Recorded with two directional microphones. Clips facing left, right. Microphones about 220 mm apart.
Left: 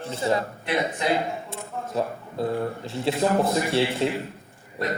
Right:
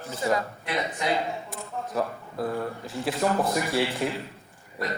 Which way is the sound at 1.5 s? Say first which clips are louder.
Left 1 dB; 25° left (ahead or behind).